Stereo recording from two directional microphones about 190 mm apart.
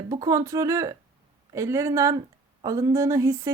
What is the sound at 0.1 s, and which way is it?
A woman's voice, 20° right (ahead or behind).